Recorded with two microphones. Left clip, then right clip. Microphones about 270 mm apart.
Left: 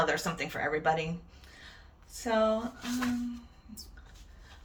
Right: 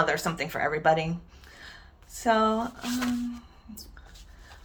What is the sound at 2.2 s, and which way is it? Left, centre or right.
Speech, centre.